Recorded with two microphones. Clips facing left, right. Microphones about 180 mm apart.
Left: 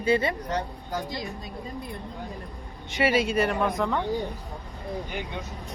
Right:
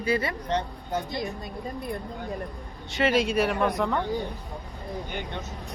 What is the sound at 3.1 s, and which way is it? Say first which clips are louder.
Speech: right 1 dB; centre (ahead or behind).